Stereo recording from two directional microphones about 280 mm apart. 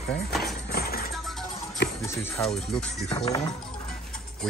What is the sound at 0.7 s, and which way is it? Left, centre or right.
Music, left.